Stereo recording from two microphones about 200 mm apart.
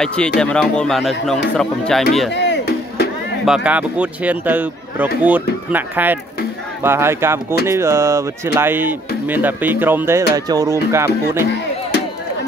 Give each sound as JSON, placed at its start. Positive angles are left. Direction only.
{"t": 0.0, "sound": "speech", "side_deg": 5}
{"t": 2.3, "sound": "music", "side_deg": 60}
{"t": 3.4, "sound": "speech", "side_deg": -5}